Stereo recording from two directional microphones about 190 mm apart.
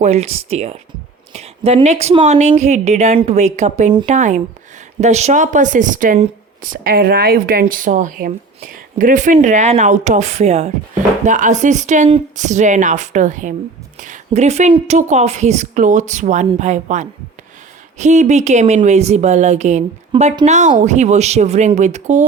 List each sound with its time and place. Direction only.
0.0 s speech: 35° right (ahead or behind)